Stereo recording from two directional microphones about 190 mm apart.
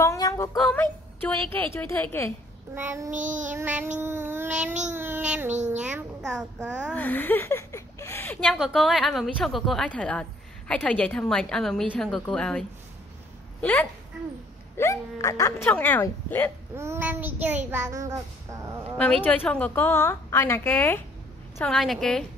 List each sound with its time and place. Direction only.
0.0 s a woman's voice: 15° left (ahead or behind)
2.7 s child singing: 10° right (ahead or behind)
3.1 s child singing: 40° right (ahead or behind)
3.5 s child singing: 10° right (ahead or behind)
6.9 s a sound: 10° left (ahead or behind)
8.5 s a woman's voice: centre (ahead or behind)
16.7 s child singing: 15° right (ahead or behind)
19.2 s a woman's voice: 10° left (ahead or behind)
21.6 s a woman's voice: centre (ahead or behind)